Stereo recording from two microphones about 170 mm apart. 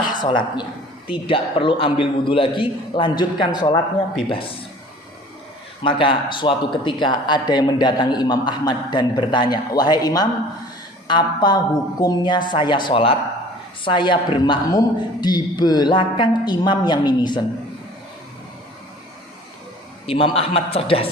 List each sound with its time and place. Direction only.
0.1 s a man's voice: 25° left (ahead or behind)
4.3 s a man's voice: 30° left (ahead or behind)
5.8 s speech: 30° left (ahead or behind)
20.1 s a man's voice: 30° left (ahead or behind)